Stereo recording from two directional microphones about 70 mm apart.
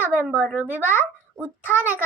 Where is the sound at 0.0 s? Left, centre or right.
Right.